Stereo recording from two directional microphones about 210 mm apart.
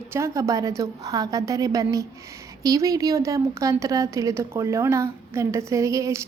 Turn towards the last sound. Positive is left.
turn(degrees=-15)  # may be behind; listen again after turning